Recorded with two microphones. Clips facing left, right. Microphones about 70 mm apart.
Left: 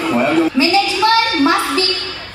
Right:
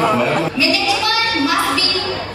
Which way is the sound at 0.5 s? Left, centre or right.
Left.